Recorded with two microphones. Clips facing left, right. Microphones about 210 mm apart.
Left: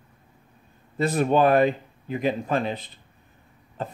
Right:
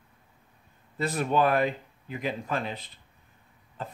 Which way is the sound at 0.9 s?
25° left (ahead or behind).